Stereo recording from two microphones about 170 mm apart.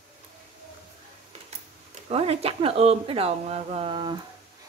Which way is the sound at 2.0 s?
35° right (ahead or behind).